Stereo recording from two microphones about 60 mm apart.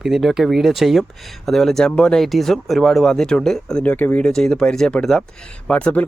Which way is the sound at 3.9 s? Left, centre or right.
Left.